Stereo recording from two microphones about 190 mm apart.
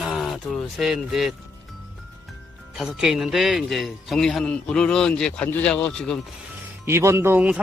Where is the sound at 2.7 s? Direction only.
5° right (ahead or behind).